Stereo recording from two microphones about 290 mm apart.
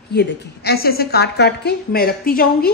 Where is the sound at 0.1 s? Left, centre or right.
Left.